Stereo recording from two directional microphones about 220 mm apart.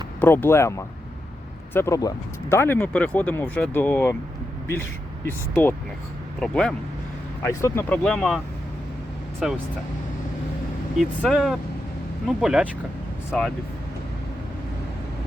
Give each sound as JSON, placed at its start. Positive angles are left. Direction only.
{"t": 0.2, "sound": "speech", "side_deg": 10}
{"t": 9.4, "sound": "speech", "side_deg": -5}
{"t": 10.9, "sound": "speech", "side_deg": 0}